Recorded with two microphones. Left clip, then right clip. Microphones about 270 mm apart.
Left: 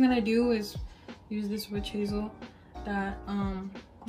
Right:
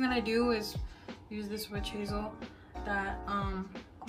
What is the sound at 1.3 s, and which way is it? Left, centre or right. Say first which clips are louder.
Speech: left 4 dB; left.